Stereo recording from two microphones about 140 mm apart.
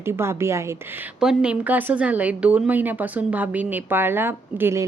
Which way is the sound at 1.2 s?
5° right (ahead or behind).